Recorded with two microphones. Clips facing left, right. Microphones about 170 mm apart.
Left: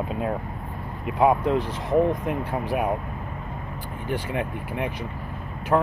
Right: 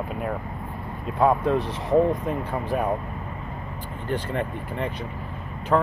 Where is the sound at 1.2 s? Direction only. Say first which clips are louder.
Even; 10° left (ahead or behind).